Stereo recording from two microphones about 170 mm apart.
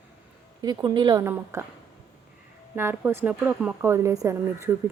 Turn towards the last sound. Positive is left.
turn(degrees=-20)  # may be behind; listen again after turning